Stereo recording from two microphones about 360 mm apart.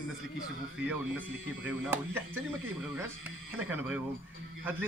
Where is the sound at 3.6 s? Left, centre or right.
Centre.